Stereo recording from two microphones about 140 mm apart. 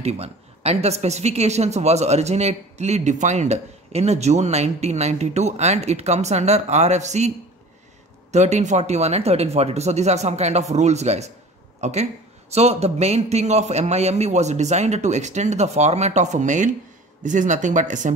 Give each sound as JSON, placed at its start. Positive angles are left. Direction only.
{"t": 0.0, "sound": "a woman's voice", "side_deg": -50}